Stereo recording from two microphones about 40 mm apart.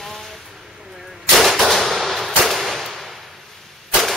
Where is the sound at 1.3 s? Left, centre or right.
Centre.